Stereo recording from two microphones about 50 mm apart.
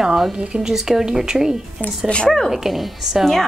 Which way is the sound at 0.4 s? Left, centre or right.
Centre.